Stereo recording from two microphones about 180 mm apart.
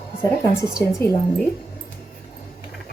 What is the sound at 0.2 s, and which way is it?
Speech, 15° left (ahead or behind).